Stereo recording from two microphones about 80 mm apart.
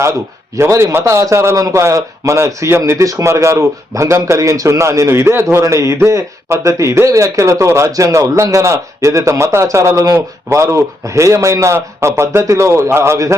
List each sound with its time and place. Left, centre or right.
0.5 s a man's voice: right